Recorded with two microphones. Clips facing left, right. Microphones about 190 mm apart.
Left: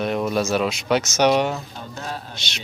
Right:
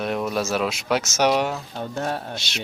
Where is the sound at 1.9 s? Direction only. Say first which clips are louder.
Right 5 dB; 60° right (ahead or behind).